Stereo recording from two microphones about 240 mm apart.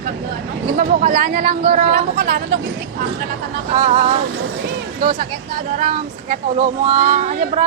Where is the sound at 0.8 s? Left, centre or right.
Right.